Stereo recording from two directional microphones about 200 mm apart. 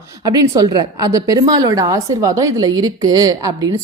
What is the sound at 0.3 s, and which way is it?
A woman's voice, 20° right (ahead or behind).